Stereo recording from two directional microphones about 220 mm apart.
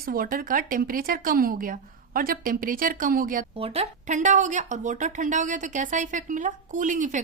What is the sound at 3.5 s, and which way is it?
A woman's voice, 25° right (ahead or behind).